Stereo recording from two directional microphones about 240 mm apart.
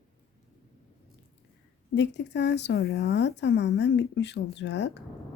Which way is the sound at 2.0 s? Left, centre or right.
Left.